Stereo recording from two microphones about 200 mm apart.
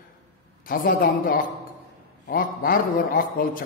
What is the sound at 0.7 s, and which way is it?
Speech, 45° left (ahead or behind).